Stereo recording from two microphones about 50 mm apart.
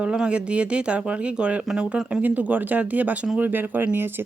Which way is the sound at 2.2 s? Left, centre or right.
Right.